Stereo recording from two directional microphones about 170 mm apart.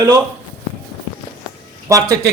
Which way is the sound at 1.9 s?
20° right (ahead or behind).